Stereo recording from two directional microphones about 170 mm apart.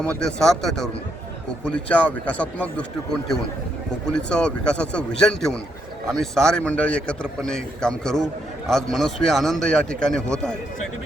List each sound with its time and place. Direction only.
0.0 s a man's voice: 5° left (ahead or behind)